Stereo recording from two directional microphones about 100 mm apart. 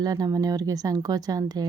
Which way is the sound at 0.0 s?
40° right (ahead or behind).